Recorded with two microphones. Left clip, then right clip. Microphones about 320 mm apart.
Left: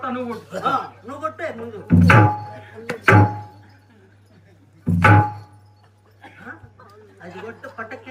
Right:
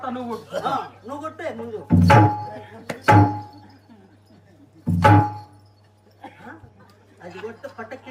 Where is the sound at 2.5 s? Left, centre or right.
Right.